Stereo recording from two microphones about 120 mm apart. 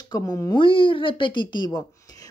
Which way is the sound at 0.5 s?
45° left (ahead or behind).